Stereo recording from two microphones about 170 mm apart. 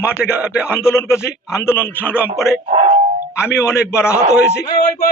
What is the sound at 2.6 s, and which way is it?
Speech, 45° right (ahead or behind).